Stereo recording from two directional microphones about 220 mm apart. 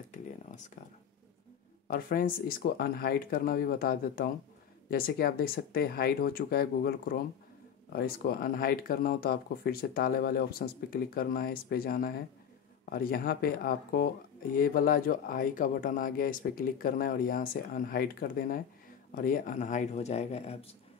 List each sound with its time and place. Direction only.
0.5 s speech: 35° left (ahead or behind)
1.9 s speech: 40° left (ahead or behind)